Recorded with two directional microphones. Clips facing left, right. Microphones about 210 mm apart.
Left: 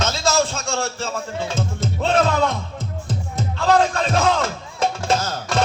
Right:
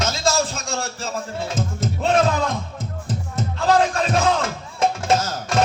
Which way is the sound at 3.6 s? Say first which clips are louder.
Left 1 dB; 30° left (ahead or behind).